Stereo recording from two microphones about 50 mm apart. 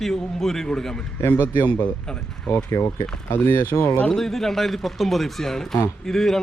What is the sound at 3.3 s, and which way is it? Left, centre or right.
Speech, left.